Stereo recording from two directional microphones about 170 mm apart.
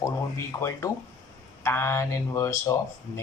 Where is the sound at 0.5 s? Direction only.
20° left (ahead or behind).